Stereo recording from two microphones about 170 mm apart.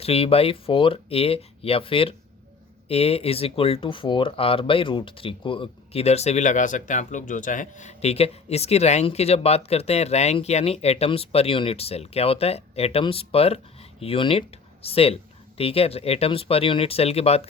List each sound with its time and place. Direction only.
0.0 s speech: 35° left (ahead or behind)